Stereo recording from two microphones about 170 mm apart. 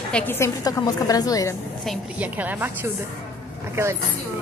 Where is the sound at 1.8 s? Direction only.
Centre (ahead or behind).